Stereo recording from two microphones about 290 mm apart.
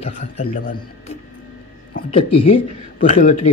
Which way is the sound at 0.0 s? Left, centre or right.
Left.